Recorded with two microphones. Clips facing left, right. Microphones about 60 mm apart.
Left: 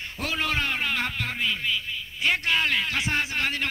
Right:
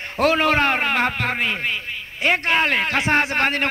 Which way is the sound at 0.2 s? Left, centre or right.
Right.